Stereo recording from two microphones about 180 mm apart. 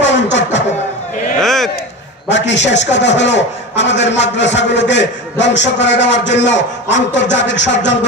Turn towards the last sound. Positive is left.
turn(degrees=80)